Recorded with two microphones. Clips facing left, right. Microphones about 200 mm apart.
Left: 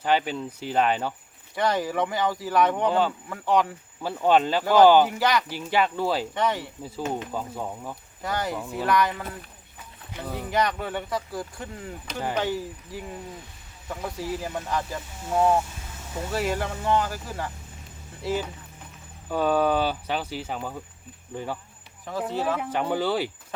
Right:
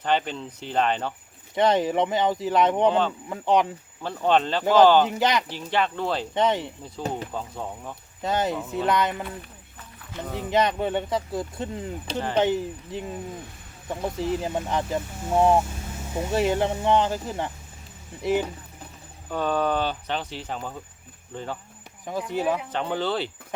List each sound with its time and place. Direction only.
0.0 s speech: 10° left (ahead or behind)
1.5 s speech: 20° right (ahead or behind)
4.0 s speech: 10° left (ahead or behind)
4.6 s speech: 20° right (ahead or behind)
5.5 s speech: 10° left (ahead or behind)
6.3 s speech: 20° right (ahead or behind)
7.3 s speech: 5° left (ahead or behind)
8.2 s speech: 20° right (ahead or behind)
19.3 s speech: 10° left (ahead or behind)
22.3 s speech: 15° right (ahead or behind)
22.7 s speech: 10° left (ahead or behind)